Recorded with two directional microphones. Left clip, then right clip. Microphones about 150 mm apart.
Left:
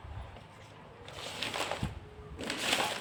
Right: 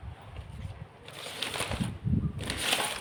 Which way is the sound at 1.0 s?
40° right (ahead or behind).